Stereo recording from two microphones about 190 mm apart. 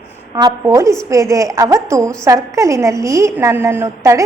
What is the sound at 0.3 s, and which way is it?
A woman's voice, 20° right (ahead or behind).